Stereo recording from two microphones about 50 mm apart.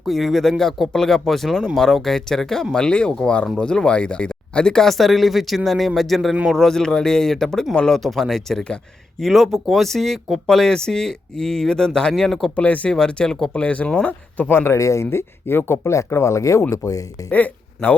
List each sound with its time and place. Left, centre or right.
0.0 s speech: centre
4.9 s speech: centre
12.5 s speech: left
12.9 s speech: centre
14.1 s speech: left
14.7 s speech: left
15.1 s speech: left
17.3 s speech: left